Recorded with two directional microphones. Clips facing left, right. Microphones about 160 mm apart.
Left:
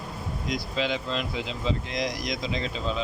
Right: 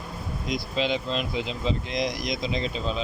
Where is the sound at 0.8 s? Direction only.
20° right (ahead or behind).